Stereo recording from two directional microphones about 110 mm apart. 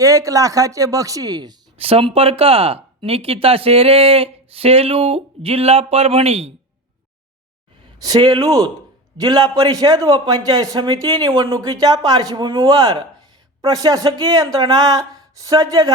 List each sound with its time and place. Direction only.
0.0 s a man's voice: 30° right (ahead or behind)
1.8 s speech: 60° right (ahead or behind)
7.9 s a man's voice: 35° right (ahead or behind)